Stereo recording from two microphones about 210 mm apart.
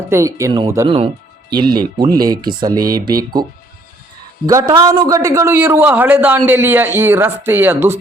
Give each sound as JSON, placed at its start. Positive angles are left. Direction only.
{"t": 0.1, "sound": "a man's voice", "side_deg": -15}
{"t": 4.4, "sound": "a man's voice", "side_deg": -15}